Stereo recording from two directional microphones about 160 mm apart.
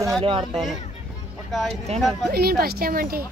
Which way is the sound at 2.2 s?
75° right (ahead or behind).